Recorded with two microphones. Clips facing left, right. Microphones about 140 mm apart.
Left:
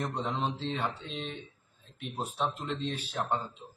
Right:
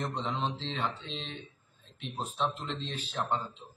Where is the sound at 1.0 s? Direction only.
55° left (ahead or behind).